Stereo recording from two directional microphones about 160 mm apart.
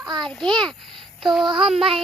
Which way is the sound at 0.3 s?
5° left (ahead or behind).